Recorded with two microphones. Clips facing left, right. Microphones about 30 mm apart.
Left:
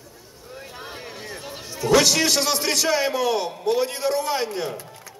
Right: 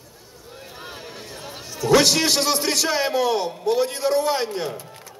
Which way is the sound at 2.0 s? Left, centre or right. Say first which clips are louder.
Right 1 dB; right.